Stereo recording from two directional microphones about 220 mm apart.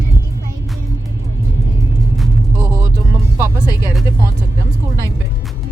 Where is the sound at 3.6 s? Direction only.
15° left (ahead or behind).